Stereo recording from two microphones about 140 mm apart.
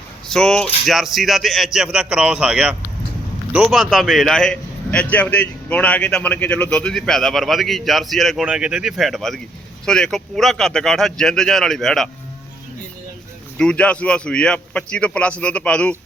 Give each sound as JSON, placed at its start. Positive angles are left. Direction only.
{"t": 0.3, "sound": "a man's voice", "side_deg": 5}
{"t": 13.6, "sound": "a man's voice", "side_deg": 5}